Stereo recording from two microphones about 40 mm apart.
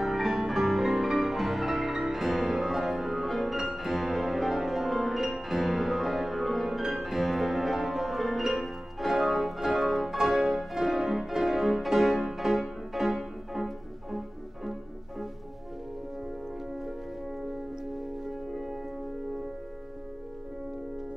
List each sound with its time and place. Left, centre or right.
0.0 s music: centre